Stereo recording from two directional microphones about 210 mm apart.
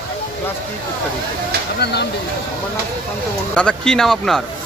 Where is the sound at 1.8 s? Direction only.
50° left (ahead or behind).